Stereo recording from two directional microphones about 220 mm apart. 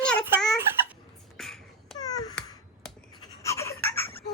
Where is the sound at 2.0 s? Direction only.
15° left (ahead or behind).